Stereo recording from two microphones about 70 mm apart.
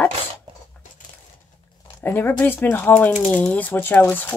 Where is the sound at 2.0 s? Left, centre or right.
Left.